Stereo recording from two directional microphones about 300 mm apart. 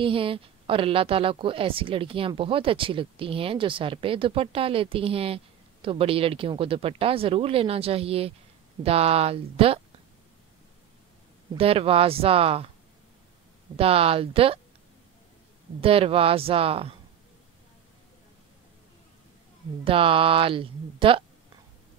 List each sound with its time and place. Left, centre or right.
0.0 s a woman's voice: centre
11.5 s speech: centre
13.7 s speech: centre
15.8 s speech: centre
19.8 s a woman's voice: centre